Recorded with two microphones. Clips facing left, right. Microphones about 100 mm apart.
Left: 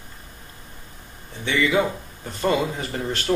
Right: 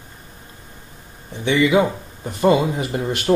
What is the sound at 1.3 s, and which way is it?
Speech, 20° right (ahead or behind).